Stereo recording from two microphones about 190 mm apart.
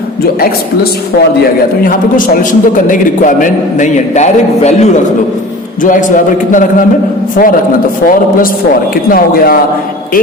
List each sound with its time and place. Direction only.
1.8 s a man's voice: 45° left (ahead or behind)